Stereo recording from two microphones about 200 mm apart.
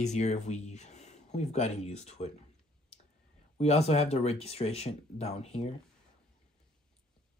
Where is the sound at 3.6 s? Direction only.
30° left (ahead or behind).